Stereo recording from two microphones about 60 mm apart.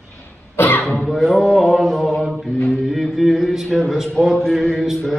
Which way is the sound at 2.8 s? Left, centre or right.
Centre.